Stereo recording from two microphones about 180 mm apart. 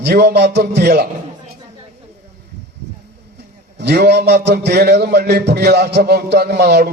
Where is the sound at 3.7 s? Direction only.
65° right (ahead or behind).